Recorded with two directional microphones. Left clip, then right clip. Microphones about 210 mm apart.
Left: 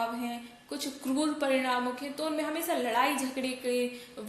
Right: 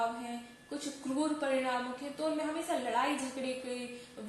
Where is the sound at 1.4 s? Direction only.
45° left (ahead or behind).